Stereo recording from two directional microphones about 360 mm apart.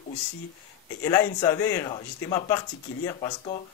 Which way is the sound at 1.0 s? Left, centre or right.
Centre.